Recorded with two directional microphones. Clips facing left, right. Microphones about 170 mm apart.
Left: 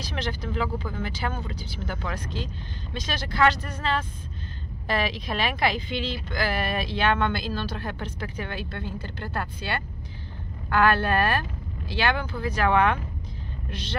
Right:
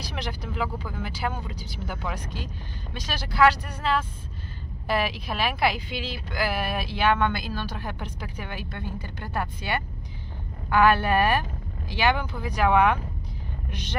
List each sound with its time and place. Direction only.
0.0 s speech: 10° right (ahead or behind)